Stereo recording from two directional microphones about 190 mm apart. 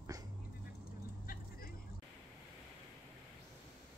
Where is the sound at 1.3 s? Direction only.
50° left (ahead or behind).